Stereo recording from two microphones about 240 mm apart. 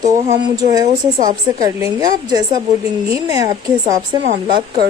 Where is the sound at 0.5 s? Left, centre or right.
Centre.